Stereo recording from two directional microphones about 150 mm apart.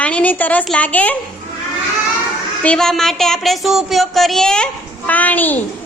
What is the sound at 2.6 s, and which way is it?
A woman's voice, 5° left (ahead or behind).